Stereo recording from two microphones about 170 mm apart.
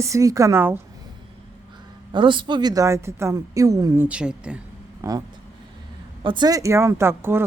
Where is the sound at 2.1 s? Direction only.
30° right (ahead or behind); by 4.6 s 5° right (ahead or behind).